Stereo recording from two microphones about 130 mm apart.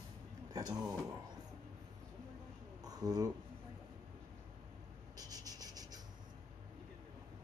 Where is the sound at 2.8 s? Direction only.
30° right (ahead or behind).